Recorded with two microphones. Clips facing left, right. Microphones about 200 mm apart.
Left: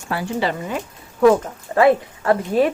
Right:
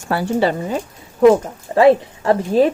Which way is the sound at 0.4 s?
35° right (ahead or behind).